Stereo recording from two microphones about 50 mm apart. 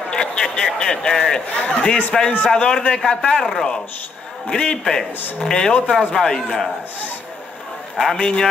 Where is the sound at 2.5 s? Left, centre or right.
Centre.